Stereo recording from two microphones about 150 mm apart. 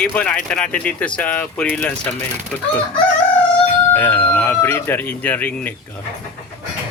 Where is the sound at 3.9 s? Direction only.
15° left (ahead or behind).